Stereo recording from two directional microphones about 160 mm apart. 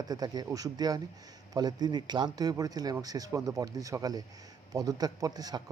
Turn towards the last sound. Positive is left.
turn(degrees=-25)  # may be behind; listen again after turning